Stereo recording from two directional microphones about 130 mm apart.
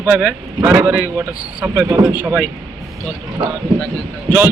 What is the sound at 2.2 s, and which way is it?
Speech, 10° right (ahead or behind).